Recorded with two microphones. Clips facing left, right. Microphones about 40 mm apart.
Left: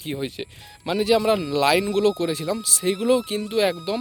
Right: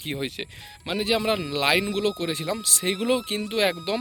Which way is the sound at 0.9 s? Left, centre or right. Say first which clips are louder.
Left 5 dB; centre.